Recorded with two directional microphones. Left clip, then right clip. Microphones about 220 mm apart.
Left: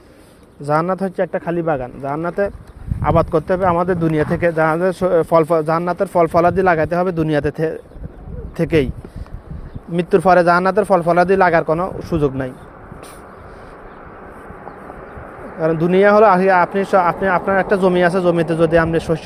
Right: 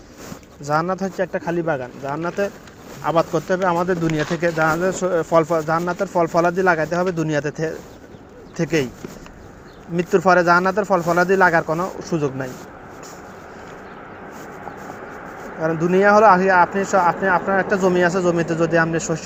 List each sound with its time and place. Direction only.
0.6 s speech: 45° left (ahead or behind)
9.9 s speech: 45° left (ahead or behind)
15.6 s speech: 45° left (ahead or behind)